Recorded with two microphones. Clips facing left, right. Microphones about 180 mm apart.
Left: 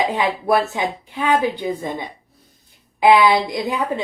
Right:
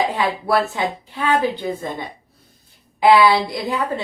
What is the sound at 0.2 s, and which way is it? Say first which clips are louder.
Speech: left 1 dB; 15° left (ahead or behind).